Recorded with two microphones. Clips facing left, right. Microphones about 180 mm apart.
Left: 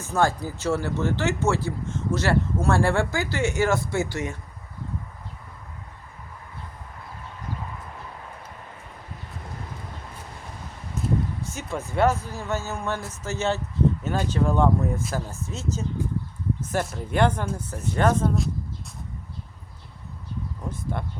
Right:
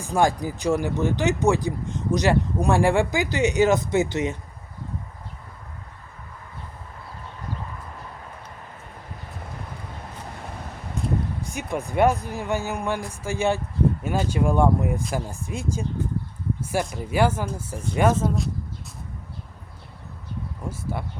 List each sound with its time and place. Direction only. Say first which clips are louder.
0.0 s speech: right 2 dB; 15° right (ahead or behind)
11.0 s a sound: even; 5° left (ahead or behind)
11.4 s speech: right 3 dB; 15° right (ahead or behind)